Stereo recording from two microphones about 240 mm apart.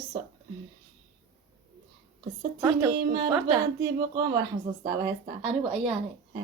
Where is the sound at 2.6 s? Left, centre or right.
Centre.